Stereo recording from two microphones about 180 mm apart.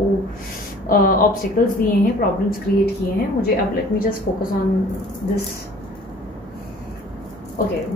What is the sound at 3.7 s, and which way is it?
Speech, 50° left (ahead or behind).